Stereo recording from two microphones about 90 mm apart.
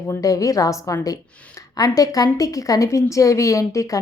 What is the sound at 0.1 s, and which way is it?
A woman's voice, 40° left (ahead or behind).